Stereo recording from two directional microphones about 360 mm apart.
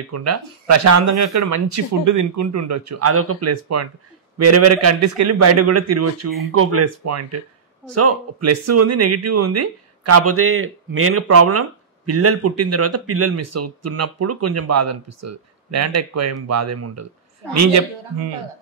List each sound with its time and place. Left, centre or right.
0.1 s speech: right